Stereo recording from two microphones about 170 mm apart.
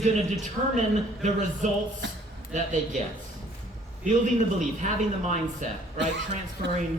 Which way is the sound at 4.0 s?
45° right (ahead or behind).